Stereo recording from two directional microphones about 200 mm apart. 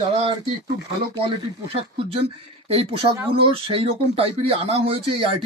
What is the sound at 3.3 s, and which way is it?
A man's voice, 30° right (ahead or behind).